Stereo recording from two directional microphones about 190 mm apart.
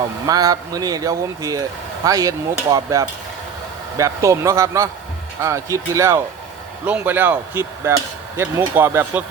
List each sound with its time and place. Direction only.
0.3 s speech: 20° right (ahead or behind)